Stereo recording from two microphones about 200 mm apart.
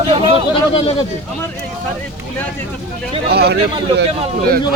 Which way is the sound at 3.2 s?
55° right (ahead or behind).